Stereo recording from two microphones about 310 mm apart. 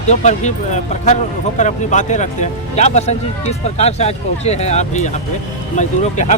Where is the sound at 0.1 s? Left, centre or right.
Left.